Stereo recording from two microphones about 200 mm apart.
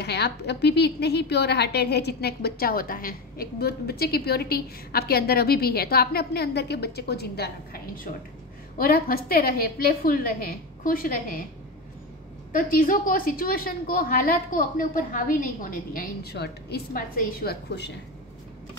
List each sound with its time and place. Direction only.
0.0 s a woman's voice: 55° left (ahead or behind)
12.5 s a woman's voice: 45° left (ahead or behind)